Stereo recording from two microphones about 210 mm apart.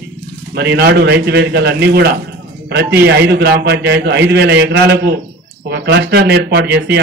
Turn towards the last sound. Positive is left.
turn(degrees=-50)  # may be behind; listen again after turning